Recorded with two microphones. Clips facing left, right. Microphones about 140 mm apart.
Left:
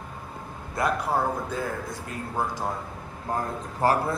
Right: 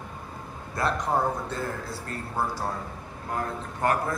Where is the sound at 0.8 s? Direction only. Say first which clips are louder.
Left 1 dB; 10° left (ahead or behind).